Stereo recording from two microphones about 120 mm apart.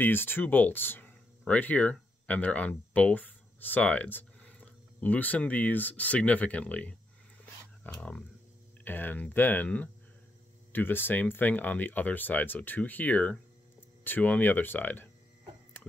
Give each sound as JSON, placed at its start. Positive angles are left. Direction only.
{"t": 0.0, "sound": "speech", "side_deg": 15}